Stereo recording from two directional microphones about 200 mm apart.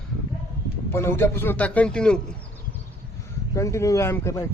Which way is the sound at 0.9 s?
10° left (ahead or behind).